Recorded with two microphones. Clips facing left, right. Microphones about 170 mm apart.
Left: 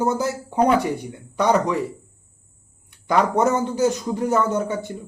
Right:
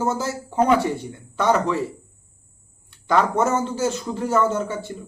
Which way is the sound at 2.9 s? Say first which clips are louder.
Even; 15° left (ahead or behind).